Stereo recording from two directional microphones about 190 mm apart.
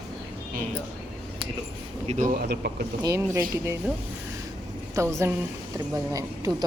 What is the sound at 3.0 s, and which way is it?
Speech, 15° right (ahead or behind).